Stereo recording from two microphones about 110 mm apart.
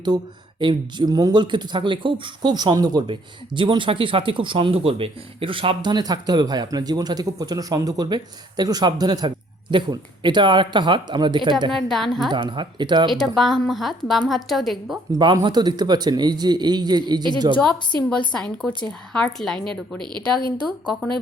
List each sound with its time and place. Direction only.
0.6 s speech: 45° right (ahead or behind)
3.1 s speech: 50° right (ahead or behind)
11.7 s a woman's voice: centre (ahead or behind)
12.3 s speech: 45° right (ahead or behind)
13.2 s a woman's voice: centre (ahead or behind)
15.4 s speech: 40° right (ahead or behind)
18.3 s a woman's voice: 5° left (ahead or behind)